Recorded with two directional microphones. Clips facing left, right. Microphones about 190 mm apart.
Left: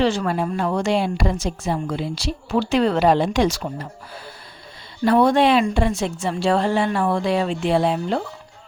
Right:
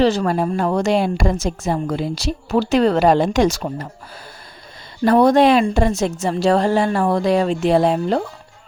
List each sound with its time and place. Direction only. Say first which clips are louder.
0.0 s a woman's voice: right 4 dB; 40° right (ahead or behind)
5.0 s a woman's voice: right 3 dB; 40° right (ahead or behind)